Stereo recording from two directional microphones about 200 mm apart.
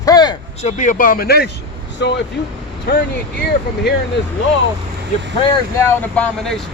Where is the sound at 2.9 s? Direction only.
50° left (ahead or behind).